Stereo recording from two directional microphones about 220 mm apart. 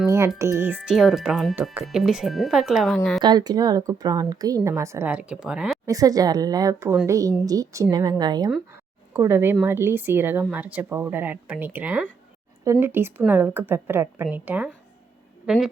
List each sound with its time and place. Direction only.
0.3 s speech: 10° right (ahead or behind)
3.2 s speech: 20° right (ahead or behind); by 15.7 s centre (ahead or behind)